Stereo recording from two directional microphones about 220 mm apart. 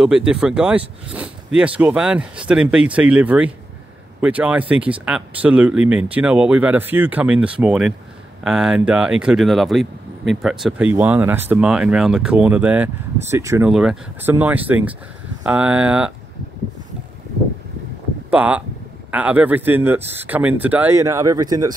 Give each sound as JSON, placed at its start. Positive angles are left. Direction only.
{"t": 0.0, "sound": "speech", "side_deg": -5}
{"t": 18.3, "sound": "speech", "side_deg": -5}